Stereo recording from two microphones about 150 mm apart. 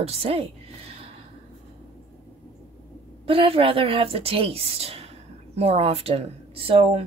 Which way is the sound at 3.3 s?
40° right (ahead or behind).